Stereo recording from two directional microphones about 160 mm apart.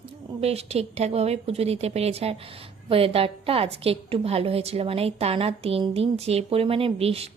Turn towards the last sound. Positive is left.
turn(degrees=-40)  # may be behind; listen again after turning